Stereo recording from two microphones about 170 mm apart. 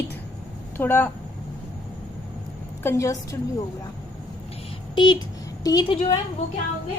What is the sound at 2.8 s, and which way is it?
Speech, 15° left (ahead or behind).